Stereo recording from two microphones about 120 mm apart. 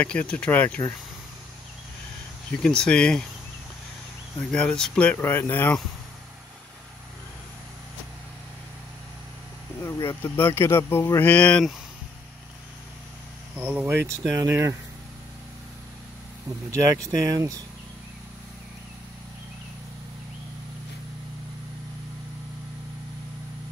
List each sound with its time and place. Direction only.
0.0 s speech: 10° left (ahead or behind)
2.6 s speech: 5° left (ahead or behind)
4.4 s speech: 10° left (ahead or behind)
9.8 s speech: 25° left (ahead or behind)
13.6 s speech: 10° right (ahead or behind)
16.7 s speech: 25° right (ahead or behind)